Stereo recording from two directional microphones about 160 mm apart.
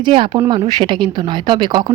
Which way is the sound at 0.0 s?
30° right (ahead or behind).